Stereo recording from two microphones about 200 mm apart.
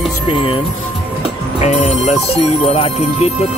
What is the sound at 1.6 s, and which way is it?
Speech, 35° left (ahead or behind).